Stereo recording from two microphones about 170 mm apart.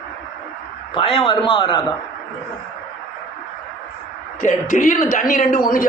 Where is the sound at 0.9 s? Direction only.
30° left (ahead or behind).